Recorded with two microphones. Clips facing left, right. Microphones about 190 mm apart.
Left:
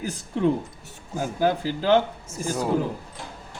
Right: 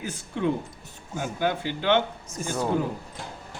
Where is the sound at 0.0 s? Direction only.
35° left (ahead or behind).